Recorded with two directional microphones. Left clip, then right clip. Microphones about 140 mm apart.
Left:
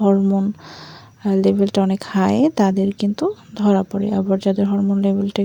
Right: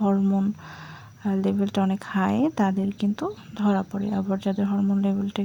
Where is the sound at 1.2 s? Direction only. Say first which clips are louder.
Left 9 dB; 40° left (ahead or behind).